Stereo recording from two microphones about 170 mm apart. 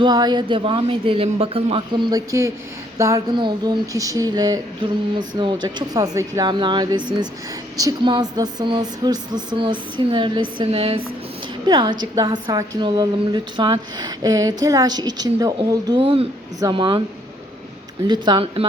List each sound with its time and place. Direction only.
0.0 s a woman's voice: 25° right (ahead or behind)
18.1 s a woman's voice: 25° right (ahead or behind)